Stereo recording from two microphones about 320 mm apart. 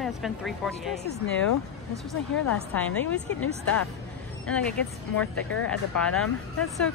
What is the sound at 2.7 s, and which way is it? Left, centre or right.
Speech, centre.